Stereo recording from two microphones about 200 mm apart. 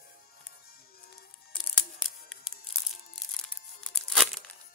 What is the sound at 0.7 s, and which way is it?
Music, 50° left (ahead or behind).